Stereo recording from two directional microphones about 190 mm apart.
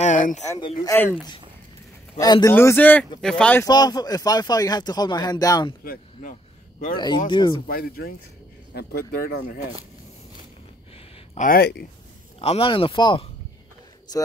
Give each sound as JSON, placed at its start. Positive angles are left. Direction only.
{"t": 0.0, "sound": "a sound", "side_deg": 40}
{"t": 0.5, "sound": "speech", "side_deg": 20}
{"t": 2.1, "sound": "speech", "side_deg": 20}
{"t": 3.6, "sound": "speech", "side_deg": 20}
{"t": 7.2, "sound": "speech", "side_deg": 25}
{"t": 7.6, "sound": "speech", "side_deg": 50}
{"t": 11.3, "sound": "speech", "side_deg": 50}
{"t": 12.4, "sound": "speech", "side_deg": 30}